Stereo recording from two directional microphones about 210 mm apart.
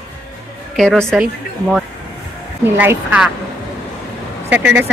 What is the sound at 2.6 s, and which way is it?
Speech, 10° right (ahead or behind).